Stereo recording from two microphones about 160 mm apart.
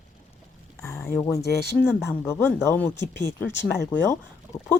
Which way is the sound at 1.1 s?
20° left (ahead or behind).